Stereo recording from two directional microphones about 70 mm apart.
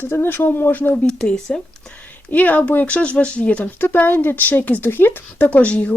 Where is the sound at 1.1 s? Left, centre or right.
Centre.